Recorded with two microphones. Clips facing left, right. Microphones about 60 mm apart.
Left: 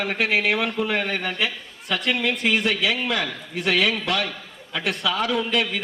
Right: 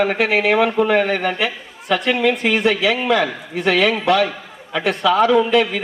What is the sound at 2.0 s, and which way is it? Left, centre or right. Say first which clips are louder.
Speech: right 6 dB; right.